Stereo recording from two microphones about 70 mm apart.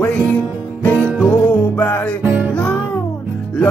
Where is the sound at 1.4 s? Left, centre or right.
Centre.